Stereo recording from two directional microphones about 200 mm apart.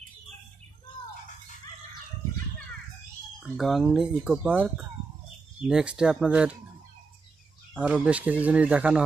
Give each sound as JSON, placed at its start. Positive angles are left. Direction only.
{"t": 3.5, "sound": "speech", "side_deg": 0}
{"t": 7.7, "sound": "speech", "side_deg": -5}